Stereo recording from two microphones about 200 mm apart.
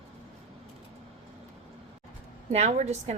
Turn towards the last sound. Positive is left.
turn(degrees=-35)  # may be behind; listen again after turning